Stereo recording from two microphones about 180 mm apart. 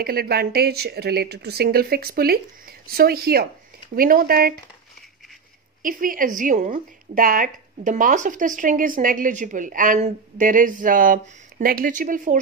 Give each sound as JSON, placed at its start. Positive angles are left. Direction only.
{"t": 0.0, "sound": "a woman's voice", "side_deg": -60}
{"t": 5.8, "sound": "a woman's voice", "side_deg": -50}